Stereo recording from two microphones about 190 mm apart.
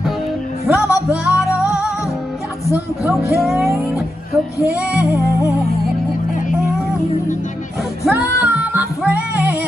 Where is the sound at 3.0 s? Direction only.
Centre (ahead or behind).